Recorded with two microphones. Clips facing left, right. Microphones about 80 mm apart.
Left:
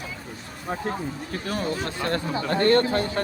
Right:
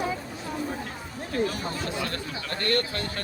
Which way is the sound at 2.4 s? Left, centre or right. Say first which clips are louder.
Left 8 dB; left.